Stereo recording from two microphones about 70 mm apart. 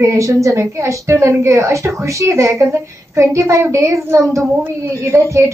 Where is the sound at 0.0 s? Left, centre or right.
Right.